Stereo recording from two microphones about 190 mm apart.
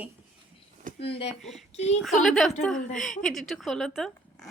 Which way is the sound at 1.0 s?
30° left (ahead or behind).